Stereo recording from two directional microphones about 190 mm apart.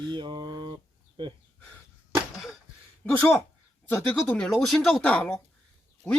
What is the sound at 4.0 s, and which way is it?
Speech, 5° left (ahead or behind).